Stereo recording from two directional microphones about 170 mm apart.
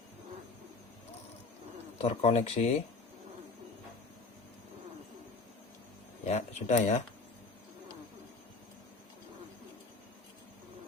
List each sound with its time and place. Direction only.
2.0 s speech: 40° left (ahead or behind)
6.2 s speech: 40° left (ahead or behind)